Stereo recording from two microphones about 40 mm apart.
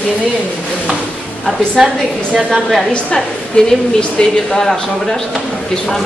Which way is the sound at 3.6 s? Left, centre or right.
Left.